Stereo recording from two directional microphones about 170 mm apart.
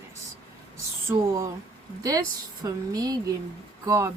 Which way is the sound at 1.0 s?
20° right (ahead or behind).